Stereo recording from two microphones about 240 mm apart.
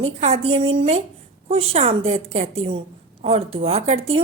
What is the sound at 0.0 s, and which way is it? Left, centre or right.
A woman's voice, right.